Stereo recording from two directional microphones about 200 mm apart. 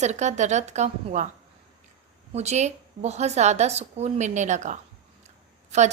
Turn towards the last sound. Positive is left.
turn(degrees=-35)  # may be behind; listen again after turning